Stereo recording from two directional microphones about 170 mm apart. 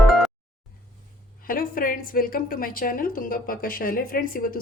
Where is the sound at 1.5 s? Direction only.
55° left (ahead or behind).